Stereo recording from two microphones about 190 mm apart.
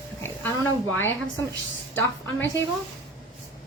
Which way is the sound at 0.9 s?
15° left (ahead or behind).